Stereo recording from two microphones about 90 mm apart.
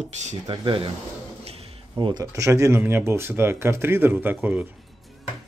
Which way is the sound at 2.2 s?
35° right (ahead or behind).